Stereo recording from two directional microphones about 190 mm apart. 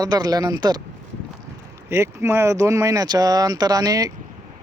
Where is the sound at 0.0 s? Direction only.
20° right (ahead or behind).